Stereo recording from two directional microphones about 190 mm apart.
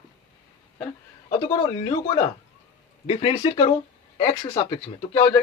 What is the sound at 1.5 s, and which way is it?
Speech, 25° left (ahead or behind).